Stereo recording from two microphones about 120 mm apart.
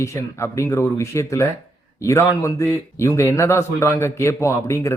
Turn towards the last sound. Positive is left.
turn(degrees=25)  # may be behind; listen again after turning